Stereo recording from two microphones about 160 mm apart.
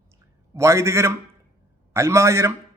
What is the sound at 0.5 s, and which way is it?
A man's voice, 15° right (ahead or behind).